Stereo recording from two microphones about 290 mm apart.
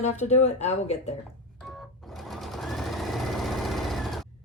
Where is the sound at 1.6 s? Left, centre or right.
Centre.